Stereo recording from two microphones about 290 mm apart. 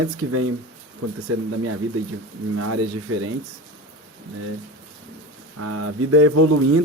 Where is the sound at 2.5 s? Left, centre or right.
Right.